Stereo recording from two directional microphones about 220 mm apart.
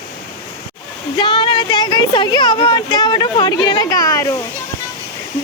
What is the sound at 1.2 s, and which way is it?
Speech, 20° left (ahead or behind).